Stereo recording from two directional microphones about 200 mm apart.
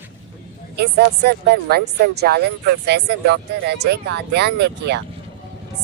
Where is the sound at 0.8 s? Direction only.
55° right (ahead or behind).